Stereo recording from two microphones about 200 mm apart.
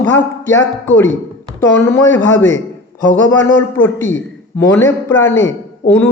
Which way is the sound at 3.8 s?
10° left (ahead or behind).